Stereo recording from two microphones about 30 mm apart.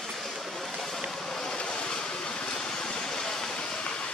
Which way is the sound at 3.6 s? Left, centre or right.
Left.